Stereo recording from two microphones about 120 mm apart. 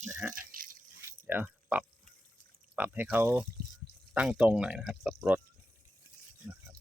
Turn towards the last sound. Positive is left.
turn(degrees=-15)  # may be behind; listen again after turning